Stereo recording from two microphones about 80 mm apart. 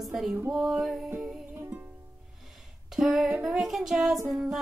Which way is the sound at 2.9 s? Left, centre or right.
Centre.